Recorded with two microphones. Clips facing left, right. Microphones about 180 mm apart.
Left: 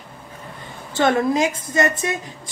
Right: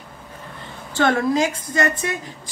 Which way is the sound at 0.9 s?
20° left (ahead or behind).